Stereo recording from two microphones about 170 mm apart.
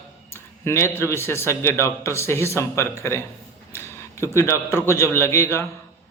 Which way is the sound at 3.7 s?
15° left (ahead or behind).